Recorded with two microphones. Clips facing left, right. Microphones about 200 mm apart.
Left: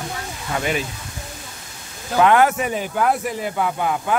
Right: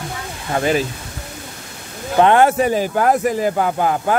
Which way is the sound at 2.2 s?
30° right (ahead or behind).